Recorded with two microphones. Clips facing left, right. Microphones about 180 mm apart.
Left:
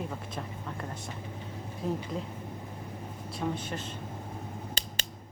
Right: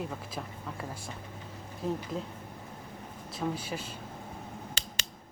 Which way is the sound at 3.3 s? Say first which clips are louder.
Even; 5° right (ahead or behind).